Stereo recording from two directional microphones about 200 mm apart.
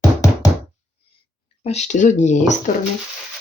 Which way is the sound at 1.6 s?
35° left (ahead or behind).